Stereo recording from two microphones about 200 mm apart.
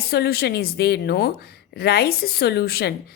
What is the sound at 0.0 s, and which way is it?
A woman's voice, 50° left (ahead or behind).